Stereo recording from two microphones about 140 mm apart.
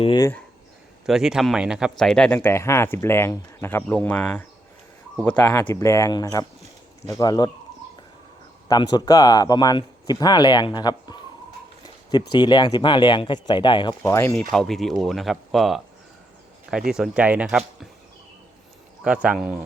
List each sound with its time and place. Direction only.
1.0 s speech: 5° right (ahead or behind)
5.8 s speech: 20° left (ahead or behind)
8.6 s speech: 30° left (ahead or behind)
14.0 s speech: 20° left (ahead or behind)
14.5 s speech: centre (ahead or behind)
19.0 s speech: 10° right (ahead or behind)